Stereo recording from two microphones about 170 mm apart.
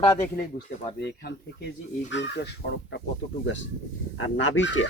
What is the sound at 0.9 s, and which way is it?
Speech, 80° left.